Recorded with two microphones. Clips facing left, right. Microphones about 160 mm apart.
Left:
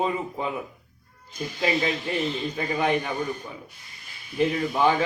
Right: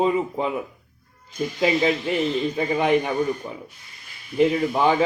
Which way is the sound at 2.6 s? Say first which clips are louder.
Right 4 dB; 25° right (ahead or behind).